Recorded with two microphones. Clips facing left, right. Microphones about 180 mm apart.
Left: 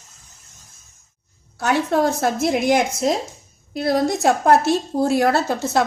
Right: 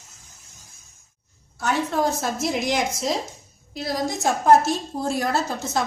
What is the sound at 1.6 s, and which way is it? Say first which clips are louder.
A woman's voice: left 4 dB; 70° left (ahead or behind).